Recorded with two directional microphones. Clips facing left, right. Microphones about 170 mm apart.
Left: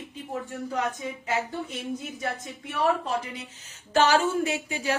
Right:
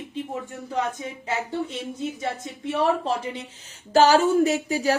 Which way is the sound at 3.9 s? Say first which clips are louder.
Right 5 dB; 35° right (ahead or behind).